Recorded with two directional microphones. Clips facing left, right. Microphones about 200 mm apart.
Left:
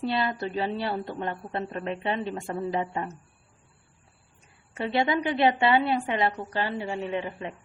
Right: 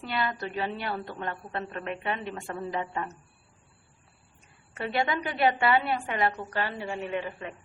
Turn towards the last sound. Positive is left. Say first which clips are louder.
# left 2 dB
turn(degrees=30)  # may be behind; listen again after turning